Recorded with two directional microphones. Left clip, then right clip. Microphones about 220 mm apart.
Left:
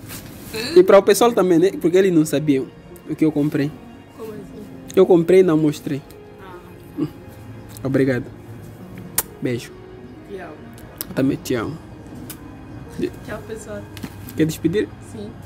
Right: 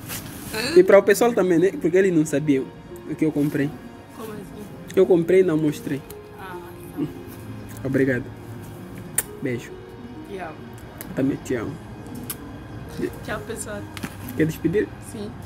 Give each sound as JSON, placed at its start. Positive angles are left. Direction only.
{"t": 0.5, "sound": "speech", "side_deg": 0}
{"t": 0.7, "sound": "speech", "side_deg": 15}
{"t": 4.9, "sound": "speech", "side_deg": 15}
{"t": 7.8, "sound": "speech", "side_deg": 15}
{"t": 9.1, "sound": "music", "side_deg": 20}
{"t": 11.1, "sound": "speech", "side_deg": 25}
{"t": 13.3, "sound": "speech", "side_deg": -10}
{"t": 14.3, "sound": "speech", "side_deg": 15}